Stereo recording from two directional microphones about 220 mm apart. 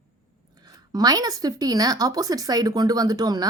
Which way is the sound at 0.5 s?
20° right (ahead or behind).